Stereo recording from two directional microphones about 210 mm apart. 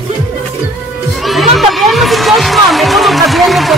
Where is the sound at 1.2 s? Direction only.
Centre (ahead or behind).